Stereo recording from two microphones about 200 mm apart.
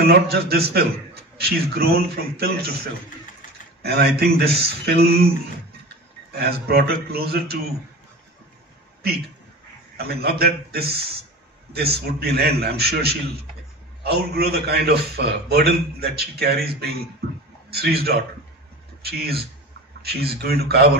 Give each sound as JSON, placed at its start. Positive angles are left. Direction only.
{"t": 0.0, "sound": "a man's voice", "side_deg": -50}
{"t": 3.8, "sound": "a man's voice", "side_deg": -55}
{"t": 6.3, "sound": "a man's voice", "side_deg": -50}
{"t": 9.9, "sound": "a man's voice", "side_deg": -50}
{"t": 12.2, "sound": "a man's voice", "side_deg": -50}